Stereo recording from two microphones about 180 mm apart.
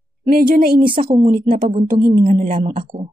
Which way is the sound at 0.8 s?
30° right (ahead or behind).